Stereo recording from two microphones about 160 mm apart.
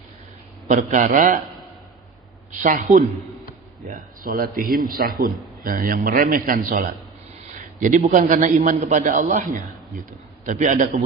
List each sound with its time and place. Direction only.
0.7 s a man's voice: 50° right (ahead or behind)
2.5 s a man's voice: 50° right (ahead or behind)